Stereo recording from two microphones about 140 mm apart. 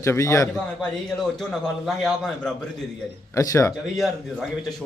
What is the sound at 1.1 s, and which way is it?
A man's voice, 5° left (ahead or behind).